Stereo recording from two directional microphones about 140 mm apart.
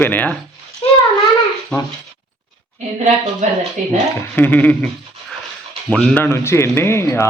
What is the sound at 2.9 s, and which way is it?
Speech, 55° right (ahead or behind).